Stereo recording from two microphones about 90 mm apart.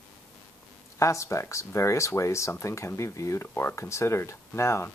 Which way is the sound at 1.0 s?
35° left (ahead or behind).